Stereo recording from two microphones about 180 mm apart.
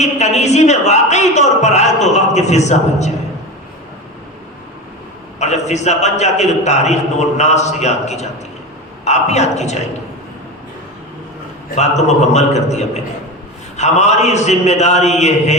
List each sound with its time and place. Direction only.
0.0 s a man's voice: 40° left (ahead or behind)
5.4 s a man's voice: 40° left (ahead or behind)
11.7 s a man's voice: 40° left (ahead or behind)